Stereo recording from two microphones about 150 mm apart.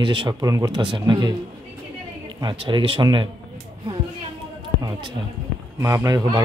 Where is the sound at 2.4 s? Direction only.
35° right (ahead or behind).